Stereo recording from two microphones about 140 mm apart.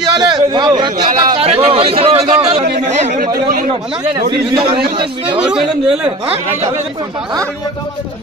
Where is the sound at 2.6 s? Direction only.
70° right (ahead or behind).